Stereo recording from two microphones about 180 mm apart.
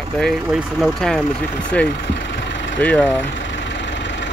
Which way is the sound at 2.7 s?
5° left (ahead or behind).